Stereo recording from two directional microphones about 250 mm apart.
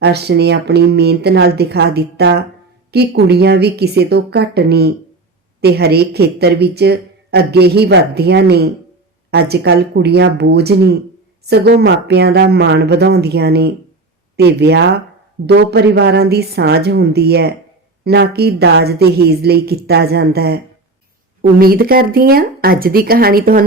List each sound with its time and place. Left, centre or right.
0.0 s speech: right
21.6 s speech: right